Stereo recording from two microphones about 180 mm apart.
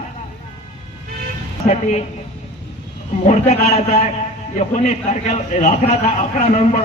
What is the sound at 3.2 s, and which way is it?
Speech, 35° left (ahead or behind).